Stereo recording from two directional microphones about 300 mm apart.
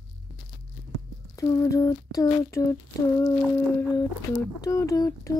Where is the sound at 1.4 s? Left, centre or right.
Centre.